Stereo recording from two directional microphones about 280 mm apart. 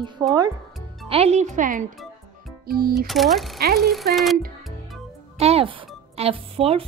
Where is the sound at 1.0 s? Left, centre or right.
Right.